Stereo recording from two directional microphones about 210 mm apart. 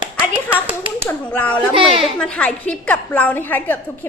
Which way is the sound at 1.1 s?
10° left (ahead or behind).